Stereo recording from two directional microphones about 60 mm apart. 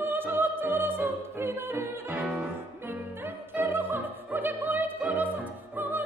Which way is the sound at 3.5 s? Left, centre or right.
Right.